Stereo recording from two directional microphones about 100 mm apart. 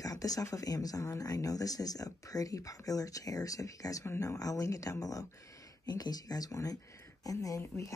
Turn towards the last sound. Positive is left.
turn(degrees=30)  # may be behind; listen again after turning